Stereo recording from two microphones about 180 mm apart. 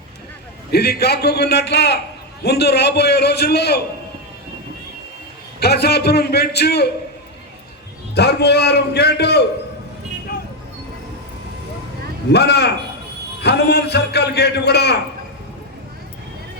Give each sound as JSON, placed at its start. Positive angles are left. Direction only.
{"t": 0.7, "sound": "a man's voice", "side_deg": 60}
{"t": 5.5, "sound": "a man's voice", "side_deg": 60}
{"t": 8.1, "sound": "a man's voice", "side_deg": 65}
{"t": 12.3, "sound": "a man's voice", "side_deg": 65}